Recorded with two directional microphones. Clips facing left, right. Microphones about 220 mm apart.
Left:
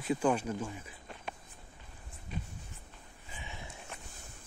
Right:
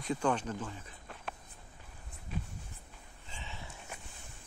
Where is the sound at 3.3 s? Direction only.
15° left (ahead or behind).